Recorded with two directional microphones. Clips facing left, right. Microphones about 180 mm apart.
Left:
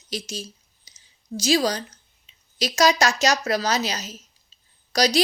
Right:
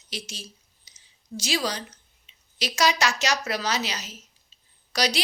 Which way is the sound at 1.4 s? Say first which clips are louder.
Left 7 dB; 40° left (ahead or behind).